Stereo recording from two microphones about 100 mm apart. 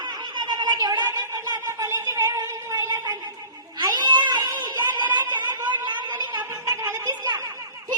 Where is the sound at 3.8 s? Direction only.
45° right (ahead or behind).